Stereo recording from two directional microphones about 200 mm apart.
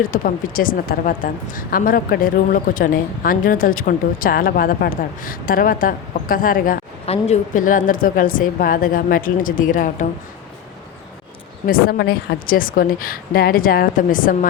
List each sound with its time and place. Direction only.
0.0 s a woman's voice: 45° left (ahead or behind)
7.0 s a woman's voice: 30° left (ahead or behind)
11.6 s a woman's voice: 50° left (ahead or behind)